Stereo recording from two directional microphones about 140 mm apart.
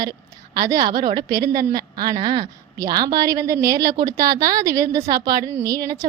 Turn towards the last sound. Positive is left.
turn(degrees=-25)  # may be behind; listen again after turning